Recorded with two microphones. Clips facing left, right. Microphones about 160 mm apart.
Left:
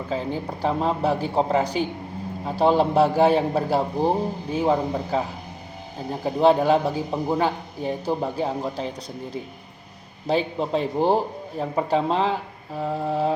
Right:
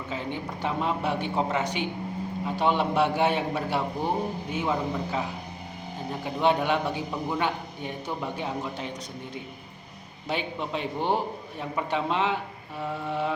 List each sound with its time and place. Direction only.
0.1 s a man's voice: 35° left (ahead or behind)
10.2 s a man's voice: 35° left (ahead or behind)